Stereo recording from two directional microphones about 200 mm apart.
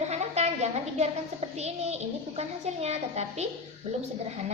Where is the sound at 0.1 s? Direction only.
35° right (ahead or behind).